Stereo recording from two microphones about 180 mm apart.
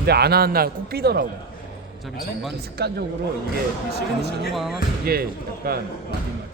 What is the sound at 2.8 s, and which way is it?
Speech, 60° right (ahead or behind).